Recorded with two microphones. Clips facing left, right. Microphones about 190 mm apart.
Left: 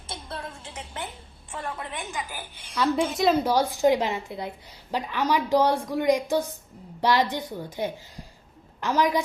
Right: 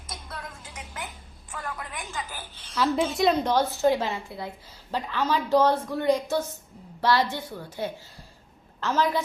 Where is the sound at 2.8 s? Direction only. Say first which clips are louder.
Even; centre (ahead or behind).